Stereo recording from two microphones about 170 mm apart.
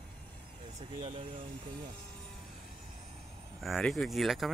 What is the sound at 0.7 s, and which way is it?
Speech, 35° right (ahead or behind).